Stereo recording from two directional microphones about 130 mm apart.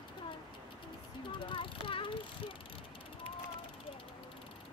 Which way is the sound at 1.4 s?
40° left (ahead or behind).